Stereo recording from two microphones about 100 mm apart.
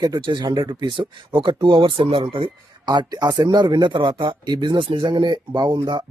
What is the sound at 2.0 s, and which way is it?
Speech, 75° right (ahead or behind).